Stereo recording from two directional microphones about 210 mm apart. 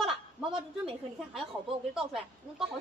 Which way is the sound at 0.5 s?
25° right (ahead or behind).